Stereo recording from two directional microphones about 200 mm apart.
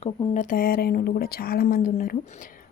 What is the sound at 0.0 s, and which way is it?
Speech, 40° left (ahead or behind).